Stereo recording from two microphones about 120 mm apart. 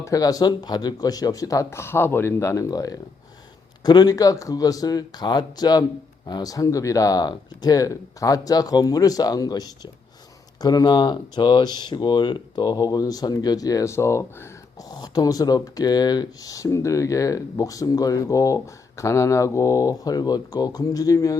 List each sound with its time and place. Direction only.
0.0 s speech: 30° left (ahead or behind)
14.8 s speech: 35° left (ahead or behind)